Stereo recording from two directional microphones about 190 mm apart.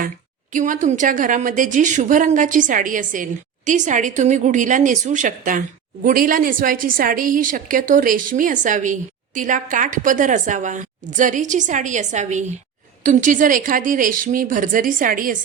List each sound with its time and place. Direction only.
0.5 s a woman's voice: 40° right (ahead or behind)